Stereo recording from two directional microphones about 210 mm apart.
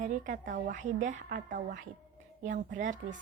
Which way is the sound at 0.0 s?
40° right (ahead or behind).